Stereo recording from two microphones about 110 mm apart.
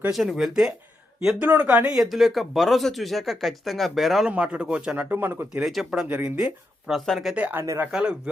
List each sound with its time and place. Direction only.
0.1 s speech: centre (ahead or behind)
1.4 s speech: 15° right (ahead or behind)
5.6 s speech: centre (ahead or behind)
7.3 s speech: 15° right (ahead or behind)
7.6 s speech: 30° right (ahead or behind)
7.9 s speech: 5° right (ahead or behind)